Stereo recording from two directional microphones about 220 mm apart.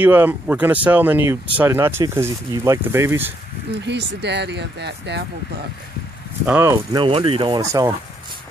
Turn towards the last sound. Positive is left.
turn(degrees=-15)  # may be behind; listen again after turning